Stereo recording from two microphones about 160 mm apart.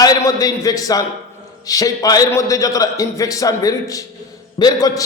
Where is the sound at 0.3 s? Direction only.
20° left (ahead or behind).